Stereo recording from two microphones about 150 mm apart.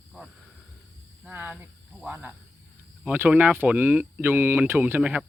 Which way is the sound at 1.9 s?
10° right (ahead or behind).